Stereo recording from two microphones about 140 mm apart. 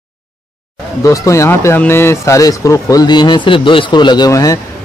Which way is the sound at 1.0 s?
25° left (ahead or behind).